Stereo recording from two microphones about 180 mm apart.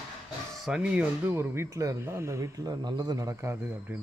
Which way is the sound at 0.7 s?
5° right (ahead or behind).